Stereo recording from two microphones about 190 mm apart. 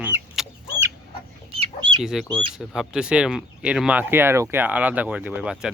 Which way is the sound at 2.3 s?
Centre (ahead or behind).